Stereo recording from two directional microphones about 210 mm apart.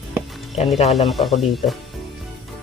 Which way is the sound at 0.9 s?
Centre (ahead or behind).